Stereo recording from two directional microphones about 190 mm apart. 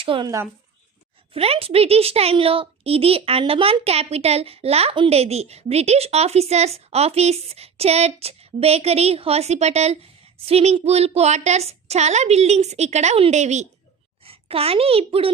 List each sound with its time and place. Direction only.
0.0 s a woman's voice: 25° right (ahead or behind)